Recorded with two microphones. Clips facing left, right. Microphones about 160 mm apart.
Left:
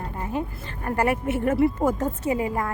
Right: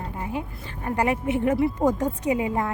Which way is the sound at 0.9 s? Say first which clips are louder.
Even; 15° right (ahead or behind).